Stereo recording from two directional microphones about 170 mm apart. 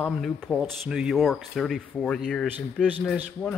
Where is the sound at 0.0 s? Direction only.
5° left (ahead or behind).